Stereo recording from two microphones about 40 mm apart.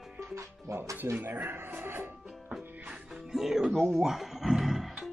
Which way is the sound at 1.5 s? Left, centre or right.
Right.